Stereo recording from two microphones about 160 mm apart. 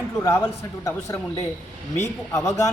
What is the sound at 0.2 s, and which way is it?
A man's voice, 20° left (ahead or behind).